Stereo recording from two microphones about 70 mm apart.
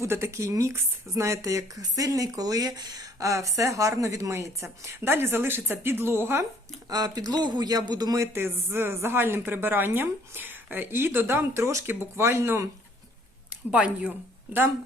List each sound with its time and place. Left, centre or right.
0.0 s speech: right
4.9 s a woman's voice: right
6.9 s speech: right
8.2 s a woman's voice: right
13.7 s speech: centre
14.1 s speech: right